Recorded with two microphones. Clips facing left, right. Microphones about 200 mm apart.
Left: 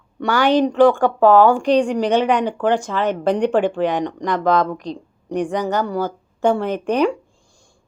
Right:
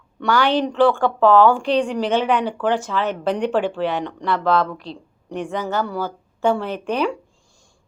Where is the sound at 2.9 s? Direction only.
45° left (ahead or behind).